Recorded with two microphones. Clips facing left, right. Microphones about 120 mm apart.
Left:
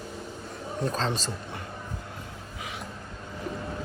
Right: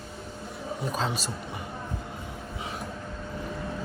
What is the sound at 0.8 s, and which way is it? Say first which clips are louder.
Speech: left 1 dB; 10° right (ahead or behind).